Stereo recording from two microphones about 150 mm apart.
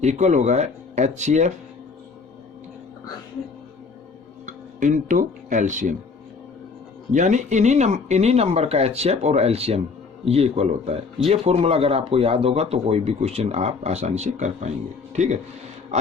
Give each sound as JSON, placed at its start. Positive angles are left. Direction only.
{"t": 0.0, "sound": "speech", "side_deg": -50}
{"t": 4.4, "sound": "speech", "side_deg": -60}
{"t": 7.1, "sound": "speech", "side_deg": -55}